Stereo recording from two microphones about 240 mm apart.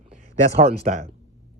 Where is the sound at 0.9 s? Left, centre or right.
Right.